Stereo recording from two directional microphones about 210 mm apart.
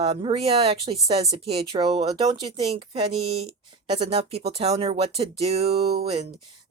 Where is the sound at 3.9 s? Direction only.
25° right (ahead or behind).